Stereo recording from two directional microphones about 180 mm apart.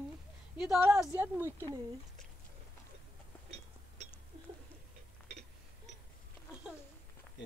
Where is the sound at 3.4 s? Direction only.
35° right (ahead or behind).